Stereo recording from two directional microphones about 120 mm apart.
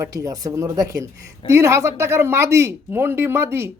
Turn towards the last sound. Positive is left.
turn(degrees=-20)  # may be behind; listen again after turning